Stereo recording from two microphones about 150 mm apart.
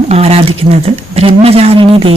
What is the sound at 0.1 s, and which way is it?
A woman's voice, 45° right (ahead or behind).